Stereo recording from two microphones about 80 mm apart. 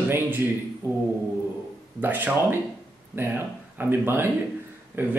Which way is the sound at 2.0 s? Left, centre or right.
Right.